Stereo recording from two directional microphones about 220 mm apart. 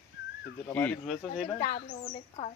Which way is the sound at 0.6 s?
5° left (ahead or behind).